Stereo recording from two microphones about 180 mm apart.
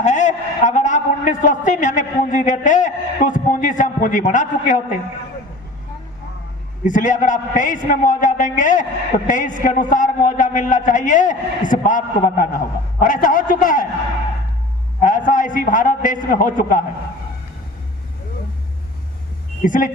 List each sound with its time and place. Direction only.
0.0 s a man's voice: 40° left (ahead or behind)
6.8 s a man's voice: 45° left (ahead or behind)
15.0 s a man's voice: 45° left (ahead or behind)
19.6 s a man's voice: 45° left (ahead or behind)